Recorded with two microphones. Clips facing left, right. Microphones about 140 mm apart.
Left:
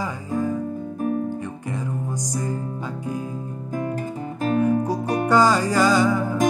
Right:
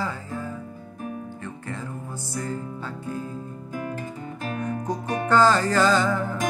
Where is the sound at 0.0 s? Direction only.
15° left (ahead or behind).